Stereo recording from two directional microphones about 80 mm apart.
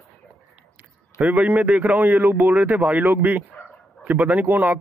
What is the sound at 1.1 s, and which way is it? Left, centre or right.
A man's voice, centre.